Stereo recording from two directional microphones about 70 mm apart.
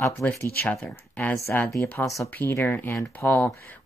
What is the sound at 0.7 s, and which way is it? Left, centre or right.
Speech, left.